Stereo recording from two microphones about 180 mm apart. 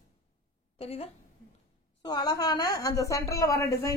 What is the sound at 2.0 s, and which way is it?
A woman's voice, 20° left (ahead or behind).